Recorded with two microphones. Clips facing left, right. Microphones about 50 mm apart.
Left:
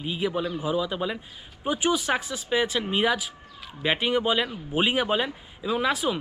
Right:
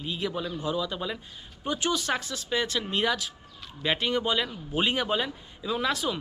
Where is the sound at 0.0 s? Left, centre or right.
Centre.